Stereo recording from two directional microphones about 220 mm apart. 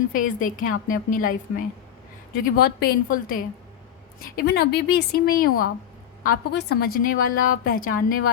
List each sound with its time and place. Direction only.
0.1 s a woman's voice: 35° left (ahead or behind)